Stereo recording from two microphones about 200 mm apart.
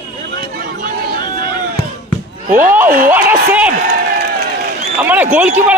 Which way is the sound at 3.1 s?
10° right (ahead or behind).